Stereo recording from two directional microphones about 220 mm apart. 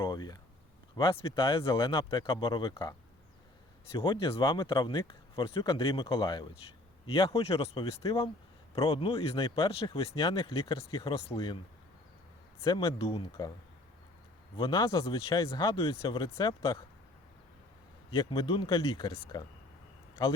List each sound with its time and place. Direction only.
0.0 s a sound: 20° left (ahead or behind)
0.9 s speech: 25° left (ahead or behind)
3.9 s speech: 20° left (ahead or behind)
12.6 s speech: 20° left (ahead or behind)
14.5 s speech: 20° left (ahead or behind)
18.1 s speech: 20° left (ahead or behind)